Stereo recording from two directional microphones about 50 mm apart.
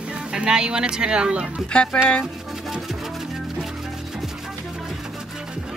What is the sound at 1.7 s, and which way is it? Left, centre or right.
Speech, centre.